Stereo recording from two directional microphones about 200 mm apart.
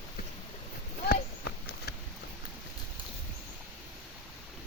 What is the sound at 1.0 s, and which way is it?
Horse, 55° left (ahead or behind).